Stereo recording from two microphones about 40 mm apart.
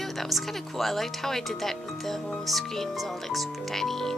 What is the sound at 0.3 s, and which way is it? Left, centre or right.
Speech, centre.